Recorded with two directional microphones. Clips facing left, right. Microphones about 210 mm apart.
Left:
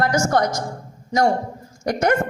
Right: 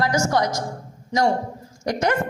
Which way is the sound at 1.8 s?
50° left (ahead or behind).